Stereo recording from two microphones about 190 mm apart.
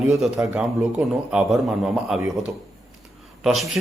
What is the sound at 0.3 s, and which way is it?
A man's voice, 5° right (ahead or behind).